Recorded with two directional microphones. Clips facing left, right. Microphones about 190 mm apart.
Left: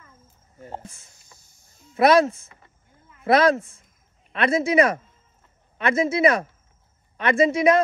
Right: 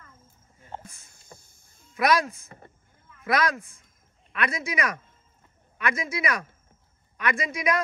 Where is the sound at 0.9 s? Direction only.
55° right (ahead or behind).